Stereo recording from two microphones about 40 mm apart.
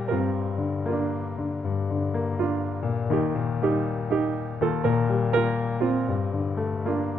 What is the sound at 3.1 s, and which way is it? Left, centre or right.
Music, right.